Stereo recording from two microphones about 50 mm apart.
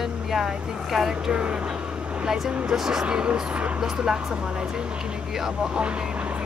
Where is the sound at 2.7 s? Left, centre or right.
Centre.